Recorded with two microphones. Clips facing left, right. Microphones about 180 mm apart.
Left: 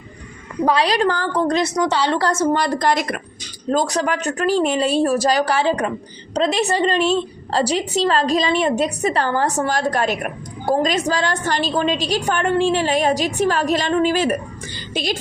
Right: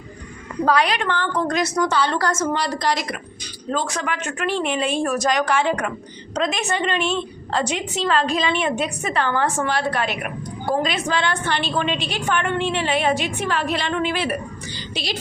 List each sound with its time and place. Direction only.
0.8 s a woman's voice: 35° left (ahead or behind)
2.5 s a woman's voice: 50° left (ahead or behind)
3.7 s a woman's voice: 35° left (ahead or behind)